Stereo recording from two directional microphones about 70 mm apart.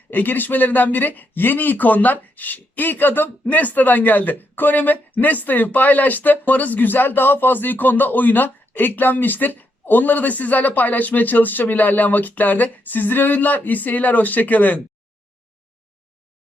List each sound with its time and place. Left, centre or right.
0.1 s speech: left